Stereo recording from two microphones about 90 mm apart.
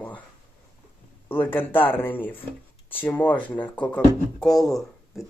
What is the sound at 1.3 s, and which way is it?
Speech, 25° left (ahead or behind).